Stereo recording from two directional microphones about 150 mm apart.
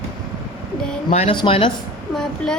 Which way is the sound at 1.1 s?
45° left (ahead or behind).